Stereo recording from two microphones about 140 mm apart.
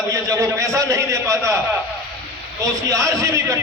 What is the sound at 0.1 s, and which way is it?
A man's voice, 20° right (ahead or behind).